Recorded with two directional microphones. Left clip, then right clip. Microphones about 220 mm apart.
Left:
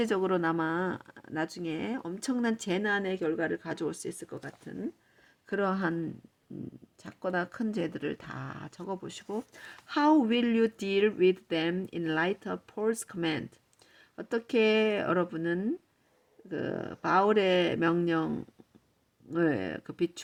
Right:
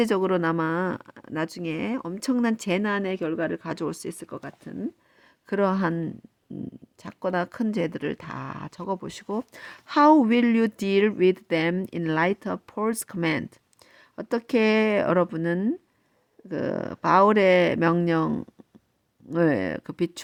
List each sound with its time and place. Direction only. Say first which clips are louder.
0.0 s speech: right 5 dB; 40° right (ahead or behind)
5.5 s speech: right 6 dB; 40° right (ahead or behind)
7.0 s speech: right 5 dB; 40° right (ahead or behind)